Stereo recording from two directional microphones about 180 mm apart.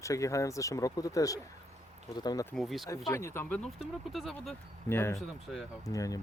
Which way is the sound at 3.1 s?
15° left (ahead or behind).